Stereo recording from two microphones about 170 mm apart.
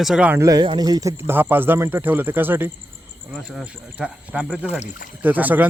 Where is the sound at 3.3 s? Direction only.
Centre (ahead or behind).